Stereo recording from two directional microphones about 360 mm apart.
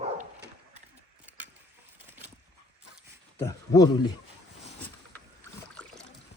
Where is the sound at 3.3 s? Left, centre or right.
Centre.